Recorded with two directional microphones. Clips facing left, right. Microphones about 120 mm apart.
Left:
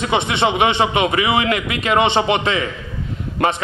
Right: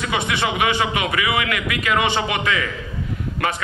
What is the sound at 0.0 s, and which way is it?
A man's voice, 25° left (ahead or behind).